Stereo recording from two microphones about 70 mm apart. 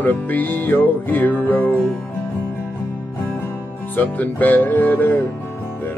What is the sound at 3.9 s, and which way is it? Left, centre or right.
Music, left.